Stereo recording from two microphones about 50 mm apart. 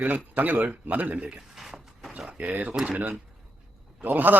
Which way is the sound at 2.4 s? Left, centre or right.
Right.